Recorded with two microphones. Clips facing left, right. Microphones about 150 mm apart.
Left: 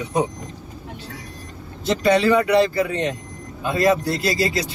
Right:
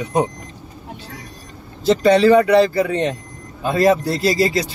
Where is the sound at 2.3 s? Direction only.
35° right (ahead or behind).